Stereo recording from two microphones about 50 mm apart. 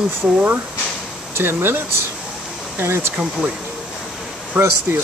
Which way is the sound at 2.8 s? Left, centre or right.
Right.